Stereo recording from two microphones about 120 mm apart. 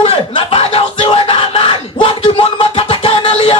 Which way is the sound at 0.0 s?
50° left (ahead or behind).